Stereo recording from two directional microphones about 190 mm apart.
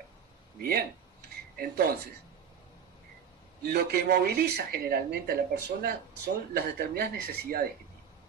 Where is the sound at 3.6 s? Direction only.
55° right (ahead or behind).